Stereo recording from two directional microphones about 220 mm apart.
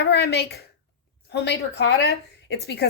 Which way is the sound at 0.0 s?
50° left (ahead or behind).